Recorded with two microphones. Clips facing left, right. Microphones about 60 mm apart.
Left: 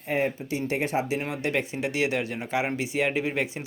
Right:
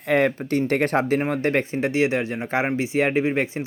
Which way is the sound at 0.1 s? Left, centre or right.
Right.